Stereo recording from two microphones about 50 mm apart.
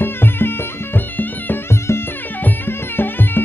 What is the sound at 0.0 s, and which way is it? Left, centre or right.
Music, left.